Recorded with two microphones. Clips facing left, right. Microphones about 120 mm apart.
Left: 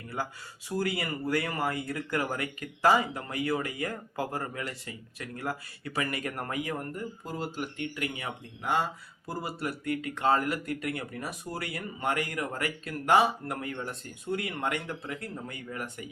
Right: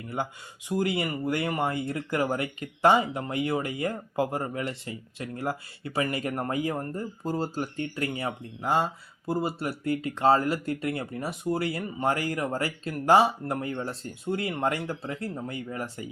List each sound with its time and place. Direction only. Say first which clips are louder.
0.2 s speech: right 2 dB; 25° right (ahead or behind)